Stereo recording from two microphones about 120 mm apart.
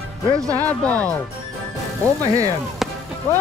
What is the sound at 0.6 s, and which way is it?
Speech, 10° left (ahead or behind).